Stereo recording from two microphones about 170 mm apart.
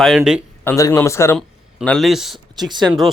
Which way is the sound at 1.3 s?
5° left (ahead or behind).